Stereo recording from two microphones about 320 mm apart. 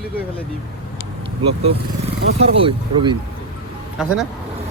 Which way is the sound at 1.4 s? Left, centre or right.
Centre.